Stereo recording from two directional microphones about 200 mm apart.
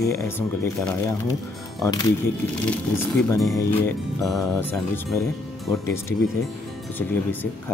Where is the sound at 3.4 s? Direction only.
5° left (ahead or behind).